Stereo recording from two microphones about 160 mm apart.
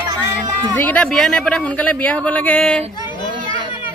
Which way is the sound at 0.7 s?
10° left (ahead or behind).